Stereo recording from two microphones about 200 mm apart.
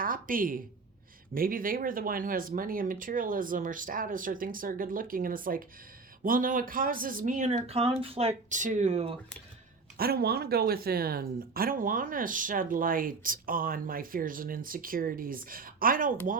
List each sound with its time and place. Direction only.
0.0 s a woman's voice: 45° right (ahead or behind)
10.0 s speech: 50° right (ahead or behind)